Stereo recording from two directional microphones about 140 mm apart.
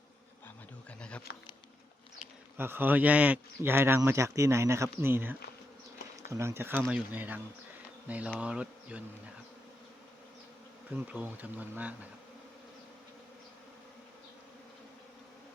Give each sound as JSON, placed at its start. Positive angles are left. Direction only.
{"t": 0.4, "sound": "bee", "side_deg": 10}
{"t": 2.6, "sound": "a man's voice", "side_deg": -15}
{"t": 10.9, "sound": "a man's voice", "side_deg": -10}